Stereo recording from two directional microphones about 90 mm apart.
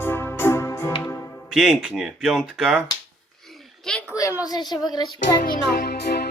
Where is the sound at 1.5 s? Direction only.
5° right (ahead or behind).